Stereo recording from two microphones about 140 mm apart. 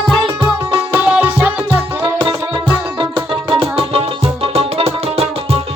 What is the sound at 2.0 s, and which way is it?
Music, 35° right (ahead or behind).